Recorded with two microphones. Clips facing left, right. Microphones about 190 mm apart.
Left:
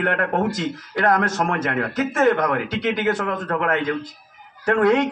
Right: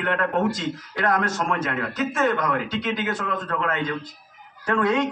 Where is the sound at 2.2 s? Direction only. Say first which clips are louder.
Left 5 dB; 60° left (ahead or behind).